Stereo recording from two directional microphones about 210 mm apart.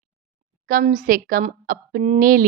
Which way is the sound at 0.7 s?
40° right (ahead or behind).